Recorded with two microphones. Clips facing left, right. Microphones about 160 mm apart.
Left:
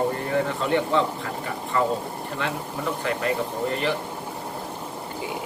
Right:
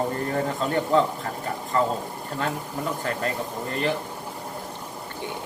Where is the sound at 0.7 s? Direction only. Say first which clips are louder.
Right 1 dB; 40° right (ahead or behind).